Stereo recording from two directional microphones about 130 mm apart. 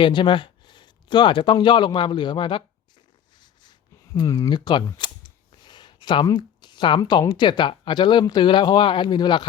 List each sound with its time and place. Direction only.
0.0 s speech: 40° left (ahead or behind)
3.3 s a sound: 35° left (ahead or behind)
6.3 s speech: 35° left (ahead or behind)